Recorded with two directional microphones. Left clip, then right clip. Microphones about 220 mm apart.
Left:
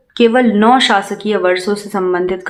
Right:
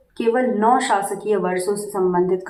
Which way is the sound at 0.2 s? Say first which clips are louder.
Left 7 dB; 35° left (ahead or behind).